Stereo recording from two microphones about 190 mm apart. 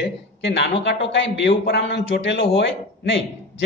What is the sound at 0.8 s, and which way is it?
A man's voice, 70° left (ahead or behind).